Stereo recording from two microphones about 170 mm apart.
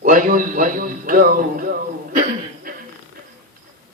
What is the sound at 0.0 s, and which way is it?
Speech, 50° right (ahead or behind).